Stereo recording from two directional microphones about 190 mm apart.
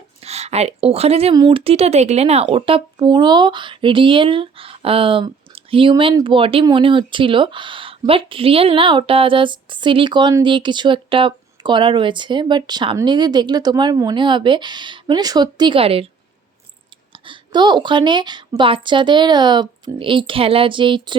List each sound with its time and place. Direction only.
0.2 s a woman's voice: 35° right (ahead or behind)
17.1 s speech: 25° right (ahead or behind)